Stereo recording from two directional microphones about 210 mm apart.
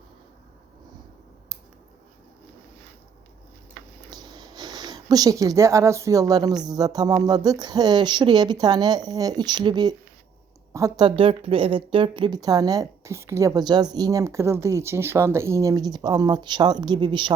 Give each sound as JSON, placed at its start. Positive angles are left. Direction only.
{"t": 4.1, "sound": "a woman's voice", "side_deg": -20}